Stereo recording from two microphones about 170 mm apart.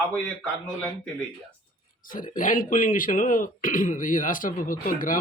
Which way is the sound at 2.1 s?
50° left (ahead or behind).